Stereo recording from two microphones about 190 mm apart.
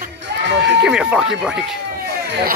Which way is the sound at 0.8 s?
5° right (ahead or behind).